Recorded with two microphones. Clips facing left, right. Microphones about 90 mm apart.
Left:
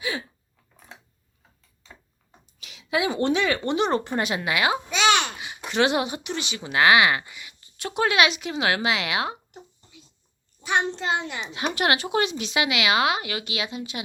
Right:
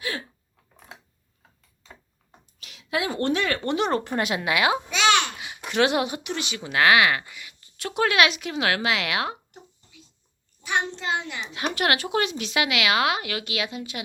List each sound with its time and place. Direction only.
0.0 s a sound: 10° left (ahead or behind)
2.6 s a woman's voice: centre (ahead or behind)
5.0 s babbling: 20° left (ahead or behind)
5.4 s speech: centre (ahead or behind)
10.6 s a child's voice: 25° left (ahead or behind)
11.5 s speech: 5° left (ahead or behind)